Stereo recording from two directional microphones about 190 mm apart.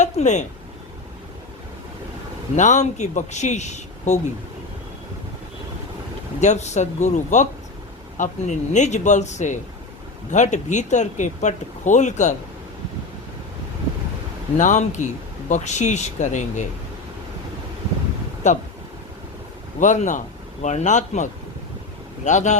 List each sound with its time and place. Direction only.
0.0 s a sound: 40° left (ahead or behind)
2.6 s speech: 40° left (ahead or behind)
6.4 s speech: 40° left (ahead or behind)
14.6 s speech: 40° left (ahead or behind)
18.4 s speech: 40° left (ahead or behind)
19.8 s a man's voice: 40° left (ahead or behind)